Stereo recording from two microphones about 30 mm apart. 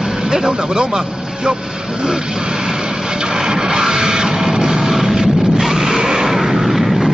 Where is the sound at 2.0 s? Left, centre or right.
Right.